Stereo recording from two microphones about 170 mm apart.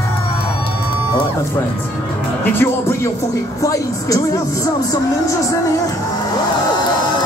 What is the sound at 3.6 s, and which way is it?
Speech, 20° left (ahead or behind).